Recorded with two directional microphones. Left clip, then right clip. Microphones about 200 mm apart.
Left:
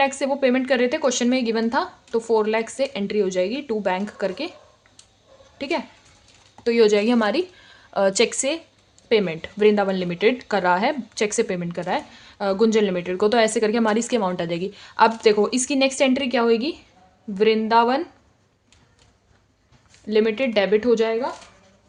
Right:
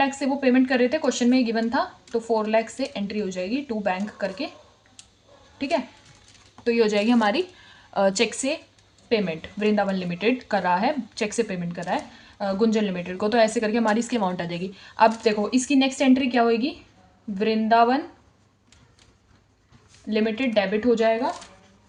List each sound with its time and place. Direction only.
0.0 s speech: 45° left (ahead or behind)
5.5 s a woman's voice: 45° left (ahead or behind)
20.1 s speech: 50° left (ahead or behind)